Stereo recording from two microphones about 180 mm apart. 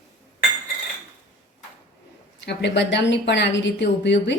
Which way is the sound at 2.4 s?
70° left (ahead or behind).